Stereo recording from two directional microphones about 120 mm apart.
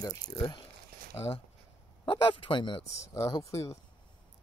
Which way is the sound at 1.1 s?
50° left (ahead or behind).